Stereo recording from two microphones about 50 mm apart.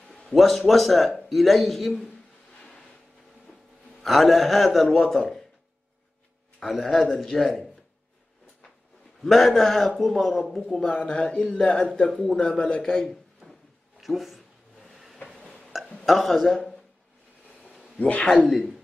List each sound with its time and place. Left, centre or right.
0.3 s a man's voice: centre
4.0 s a man's voice: centre
6.6 s a man's voice: centre
9.2 s a man's voice: centre
10.9 s a man's voice: left
12.8 s a man's voice: centre
13.4 s a sound: centre
15.3 s burping: centre
16.1 s a man's voice: centre
17.9 s speech: left